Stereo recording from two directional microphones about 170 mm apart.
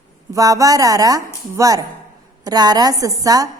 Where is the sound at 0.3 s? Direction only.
20° right (ahead or behind).